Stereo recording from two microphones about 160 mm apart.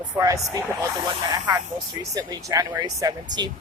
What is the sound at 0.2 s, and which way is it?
Speech, 20° right (ahead or behind).